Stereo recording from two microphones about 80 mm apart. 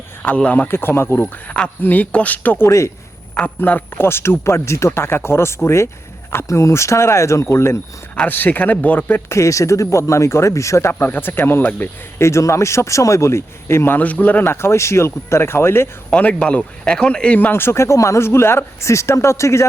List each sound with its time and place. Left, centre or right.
0.2 s speech: centre
0.7 s speech: left
1.2 s speech: centre
2.6 s speech: left
3.6 s speech: left
8.1 s speech: centre
9.3 s speech: left
12.2 s speech: left; by 14.4 s centre
14.4 s speech: left
16.0 s speech: centre
17.5 s speech: left